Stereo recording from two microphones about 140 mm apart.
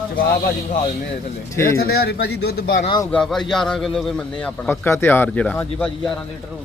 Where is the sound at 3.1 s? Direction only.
5° left (ahead or behind).